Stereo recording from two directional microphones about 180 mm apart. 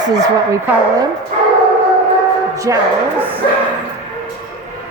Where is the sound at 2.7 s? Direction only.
15° right (ahead or behind).